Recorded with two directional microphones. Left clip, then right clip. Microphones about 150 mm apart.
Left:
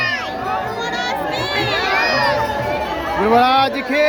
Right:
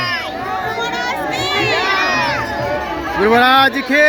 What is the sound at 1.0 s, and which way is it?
Crowd, 30° right (ahead or behind).